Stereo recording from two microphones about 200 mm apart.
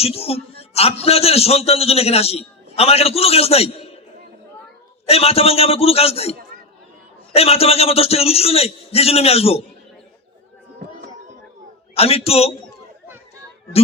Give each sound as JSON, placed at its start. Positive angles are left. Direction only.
{"t": 0.0, "sound": "a man's voice", "side_deg": 30}
{"t": 5.0, "sound": "a man's voice", "side_deg": 30}
{"t": 7.3, "sound": "a man's voice", "side_deg": 30}
{"t": 11.9, "sound": "a man's voice", "side_deg": 30}